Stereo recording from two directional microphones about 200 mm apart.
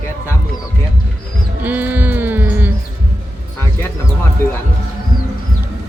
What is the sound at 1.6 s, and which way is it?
Music, 10° right (ahead or behind).